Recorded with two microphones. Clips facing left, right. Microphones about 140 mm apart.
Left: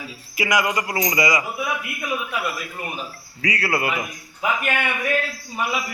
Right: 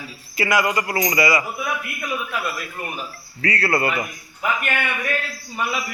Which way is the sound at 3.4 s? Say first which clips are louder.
Right 2 dB; 10° left (ahead or behind).